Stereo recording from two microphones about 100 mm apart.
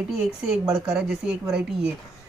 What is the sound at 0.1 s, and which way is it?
A woman's voice, 5° right (ahead or behind).